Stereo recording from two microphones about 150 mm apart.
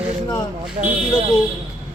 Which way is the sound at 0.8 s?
50° right (ahead or behind).